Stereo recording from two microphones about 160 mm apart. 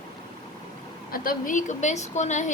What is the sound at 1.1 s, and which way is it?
A woman's voice, 65° left (ahead or behind).